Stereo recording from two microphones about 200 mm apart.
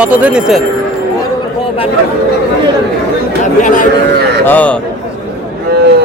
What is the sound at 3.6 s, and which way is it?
Speech, 40° left (ahead or behind).